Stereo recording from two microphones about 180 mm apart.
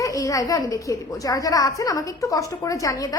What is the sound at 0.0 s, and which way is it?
A woman's voice, 20° left (ahead or behind).